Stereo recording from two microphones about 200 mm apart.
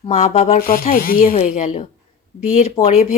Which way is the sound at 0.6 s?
45° left (ahead or behind).